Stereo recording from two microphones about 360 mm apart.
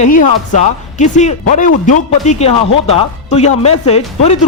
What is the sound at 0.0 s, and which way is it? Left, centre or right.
A man's voice, left.